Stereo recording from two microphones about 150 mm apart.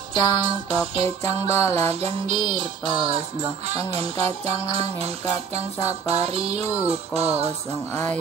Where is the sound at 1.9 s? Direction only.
40° right (ahead or behind).